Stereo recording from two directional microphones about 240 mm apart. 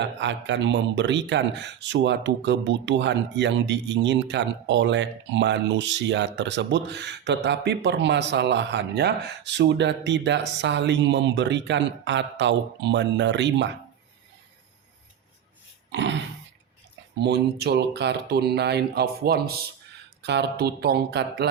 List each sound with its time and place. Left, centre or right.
0.0 s speech: right
15.9 s speech: right